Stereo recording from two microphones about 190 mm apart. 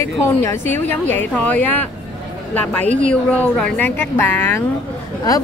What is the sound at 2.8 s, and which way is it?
Speech, 40° right (ahead or behind).